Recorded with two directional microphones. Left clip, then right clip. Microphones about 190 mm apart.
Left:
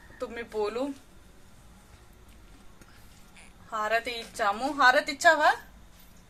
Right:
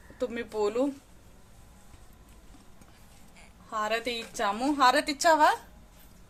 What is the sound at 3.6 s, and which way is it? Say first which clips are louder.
A woman's voice: left 1 dB; 40° right (ahead or behind).